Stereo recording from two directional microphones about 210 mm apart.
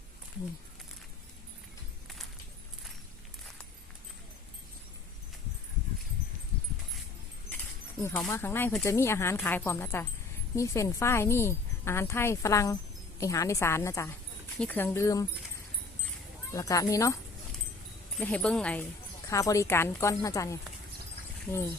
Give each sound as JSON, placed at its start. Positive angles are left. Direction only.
{"t": 8.0, "sound": "speech", "side_deg": 10}
{"t": 16.5, "sound": "speech", "side_deg": 15}
{"t": 18.2, "sound": "speech", "side_deg": 5}